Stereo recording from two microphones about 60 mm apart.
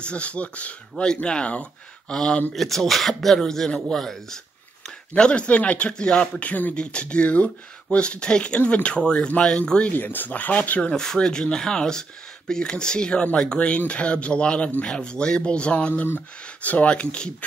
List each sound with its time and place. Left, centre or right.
0.0 s speech: centre
5.1 s speech: centre
9.9 s speech: left
10.9 s speech: centre